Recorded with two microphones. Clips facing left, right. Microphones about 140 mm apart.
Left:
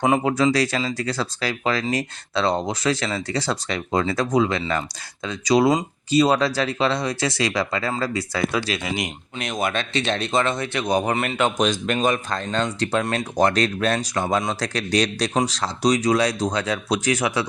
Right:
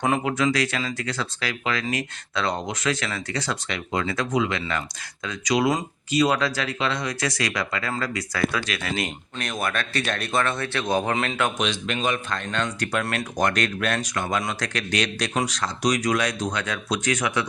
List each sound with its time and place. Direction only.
0.3 s speech: 35° left (ahead or behind)
8.9 s speech: 15° left (ahead or behind)
11.1 s speech: 5° left (ahead or behind)
11.5 s speech: 45° left (ahead or behind)
12.8 s speech: 25° left (ahead or behind)